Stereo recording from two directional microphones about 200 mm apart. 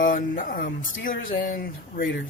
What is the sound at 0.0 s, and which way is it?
Speech, 45° left (ahead or behind).